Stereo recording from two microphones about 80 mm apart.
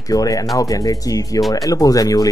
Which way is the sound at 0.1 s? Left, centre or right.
Left.